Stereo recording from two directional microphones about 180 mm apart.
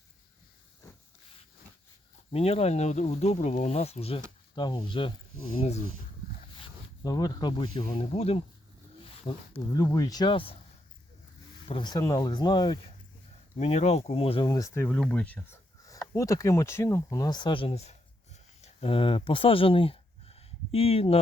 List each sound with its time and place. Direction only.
2.3 s speech: 35° left (ahead or behind)
5.6 s speech: 35° left (ahead or behind)
7.0 s speech: 20° left (ahead or behind)
9.7 s speech: 20° left (ahead or behind)
11.7 s speech: 25° left (ahead or behind)
13.6 s speech: 35° left (ahead or behind)
14.4 s speech: 20° left (ahead or behind)